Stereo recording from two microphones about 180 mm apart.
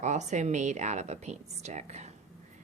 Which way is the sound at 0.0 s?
40° right (ahead or behind).